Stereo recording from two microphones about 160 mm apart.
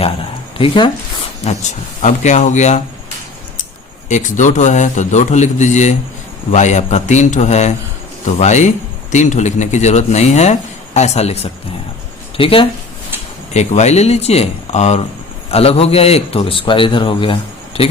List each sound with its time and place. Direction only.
0.6 s a man's voice: 30° left (ahead or behind)
2.0 s speech: 50° left (ahead or behind)
4.1 s a man's voice: 50° left (ahead or behind); by 12.6 s 35° left (ahead or behind)
13.5 s a man's voice: 45° left (ahead or behind)